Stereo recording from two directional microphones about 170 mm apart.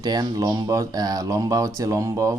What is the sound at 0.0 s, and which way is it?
Speech, 25° right (ahead or behind).